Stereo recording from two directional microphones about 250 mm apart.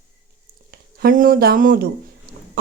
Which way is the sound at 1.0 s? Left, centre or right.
Right.